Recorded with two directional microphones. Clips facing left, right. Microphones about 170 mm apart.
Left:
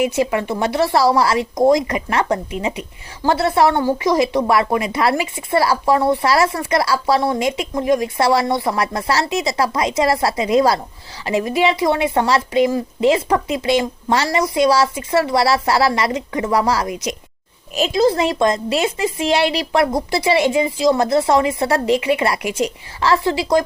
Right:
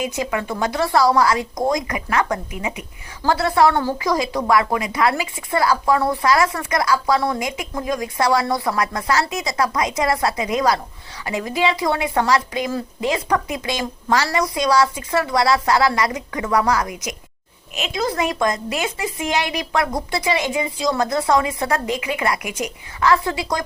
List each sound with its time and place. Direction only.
0.0 s speech: 30° left (ahead or behind)